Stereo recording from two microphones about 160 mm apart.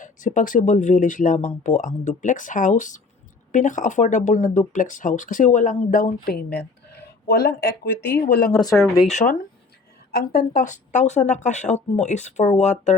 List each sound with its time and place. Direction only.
0.0 s speech: 50° left (ahead or behind); by 7.7 s 90° left
8.3 s speech: 60° left (ahead or behind)
10.1 s speech: 70° left (ahead or behind); by 13.0 s 45° left (ahead or behind)